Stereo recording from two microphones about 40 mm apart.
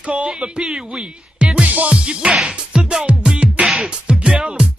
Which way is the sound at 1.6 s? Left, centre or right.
Right.